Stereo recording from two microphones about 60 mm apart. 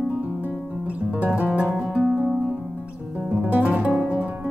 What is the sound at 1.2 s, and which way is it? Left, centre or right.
Music, right.